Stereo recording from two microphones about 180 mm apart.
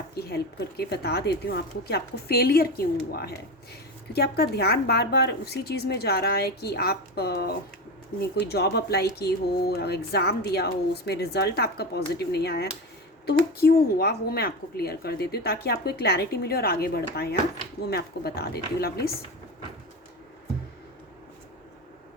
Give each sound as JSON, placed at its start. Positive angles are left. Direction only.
{"t": 0.1, "sound": "a woman's voice", "side_deg": 60}